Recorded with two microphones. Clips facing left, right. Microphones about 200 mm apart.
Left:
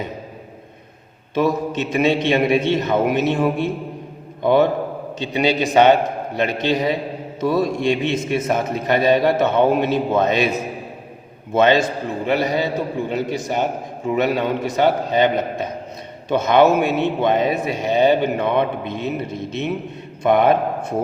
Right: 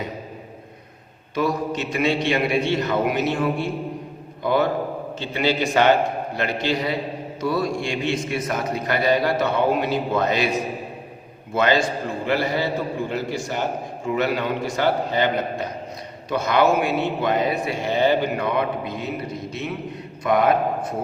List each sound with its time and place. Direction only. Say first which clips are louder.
1.4 s a man's voice: left 4 dB; 20° left (ahead or behind)
11.5 s a man's voice: left 4 dB; 20° left (ahead or behind)